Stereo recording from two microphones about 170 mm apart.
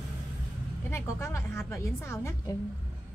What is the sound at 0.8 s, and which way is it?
A woman's voice, 15° left (ahead or behind).